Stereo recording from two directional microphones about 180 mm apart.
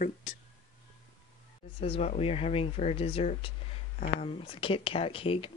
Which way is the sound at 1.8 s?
35° left (ahead or behind).